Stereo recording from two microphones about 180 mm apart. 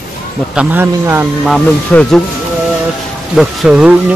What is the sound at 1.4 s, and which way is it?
Speech, 5° left (ahead or behind).